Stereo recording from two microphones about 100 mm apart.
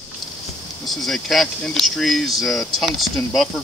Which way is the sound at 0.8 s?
5° left (ahead or behind).